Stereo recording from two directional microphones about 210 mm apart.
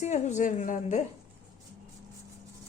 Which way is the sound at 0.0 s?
35° left (ahead or behind).